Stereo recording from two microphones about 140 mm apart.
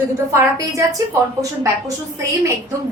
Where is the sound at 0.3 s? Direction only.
20° right (ahead or behind).